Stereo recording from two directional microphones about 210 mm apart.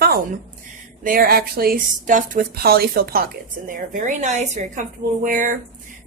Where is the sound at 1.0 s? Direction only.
45° right (ahead or behind).